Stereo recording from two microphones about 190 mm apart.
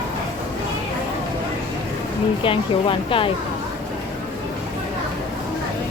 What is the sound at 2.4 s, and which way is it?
Speech, 25° left (ahead or behind).